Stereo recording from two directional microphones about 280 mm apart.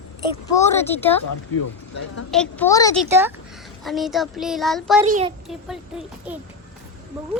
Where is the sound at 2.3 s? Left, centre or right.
Centre.